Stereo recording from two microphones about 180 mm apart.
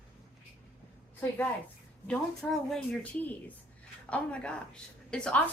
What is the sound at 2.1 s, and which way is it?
A woman's voice, centre (ahead or behind).